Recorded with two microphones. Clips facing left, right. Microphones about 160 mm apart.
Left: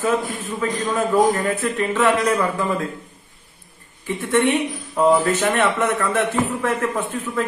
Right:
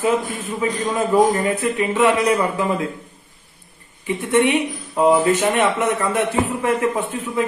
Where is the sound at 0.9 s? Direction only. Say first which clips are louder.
Right 1 dB; 5° right (ahead or behind).